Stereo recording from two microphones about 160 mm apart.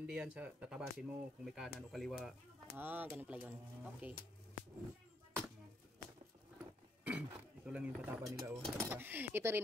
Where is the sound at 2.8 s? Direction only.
10° right (ahead or behind).